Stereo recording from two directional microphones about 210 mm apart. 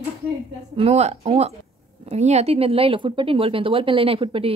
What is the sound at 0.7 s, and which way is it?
Speech, 30° right (ahead or behind).